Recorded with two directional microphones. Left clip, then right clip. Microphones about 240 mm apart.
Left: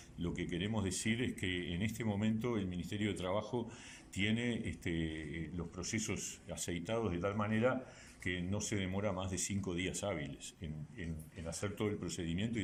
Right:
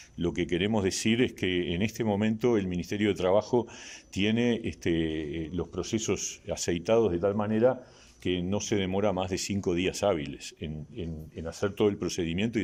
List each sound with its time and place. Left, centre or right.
0.2 s speech: right